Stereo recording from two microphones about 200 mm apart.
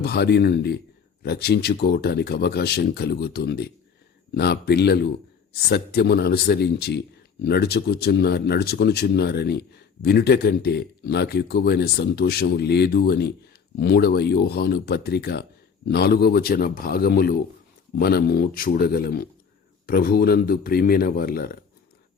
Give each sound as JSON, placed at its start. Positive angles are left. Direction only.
{"t": 0.0, "sound": "speech", "side_deg": 55}